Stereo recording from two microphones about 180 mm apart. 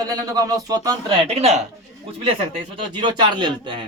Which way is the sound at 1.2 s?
35° right (ahead or behind).